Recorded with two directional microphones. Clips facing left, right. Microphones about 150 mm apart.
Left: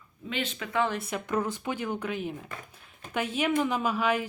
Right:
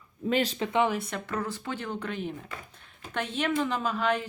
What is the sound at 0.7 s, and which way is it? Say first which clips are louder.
Speech: right 1 dB; 20° right (ahead or behind).